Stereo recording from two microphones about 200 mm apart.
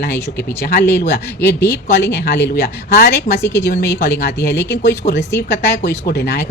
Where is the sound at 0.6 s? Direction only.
55° left (ahead or behind).